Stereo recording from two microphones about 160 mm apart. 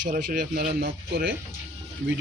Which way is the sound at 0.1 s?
60° right (ahead or behind).